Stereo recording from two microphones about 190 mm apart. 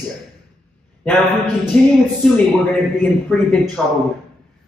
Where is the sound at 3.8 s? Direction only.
Centre (ahead or behind).